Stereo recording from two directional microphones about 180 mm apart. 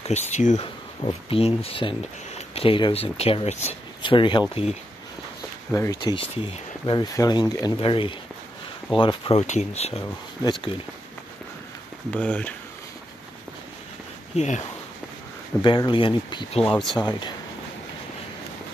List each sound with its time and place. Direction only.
0.0 s speech: 40° left (ahead or behind)
5.7 s speech: 15° left (ahead or behind)
6.1 s speech: 30° left (ahead or behind)
12.1 s speech: 5° left (ahead or behind)
14.3 s speech: 40° left (ahead or behind)
15.6 s speech: 25° left (ahead or behind)
16.7 s speech: centre (ahead or behind)